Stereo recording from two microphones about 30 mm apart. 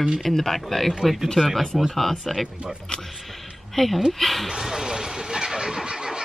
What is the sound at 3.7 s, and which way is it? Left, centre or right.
Speech, centre.